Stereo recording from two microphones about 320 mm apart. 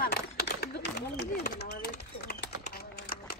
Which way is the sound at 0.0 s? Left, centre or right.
Left.